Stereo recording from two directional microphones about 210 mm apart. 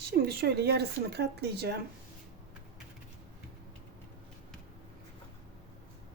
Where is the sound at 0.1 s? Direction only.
50° right (ahead or behind).